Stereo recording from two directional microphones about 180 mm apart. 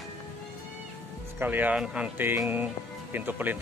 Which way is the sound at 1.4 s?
10° right (ahead or behind).